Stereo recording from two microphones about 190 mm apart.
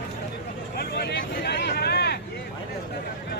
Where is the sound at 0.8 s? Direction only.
55° left (ahead or behind).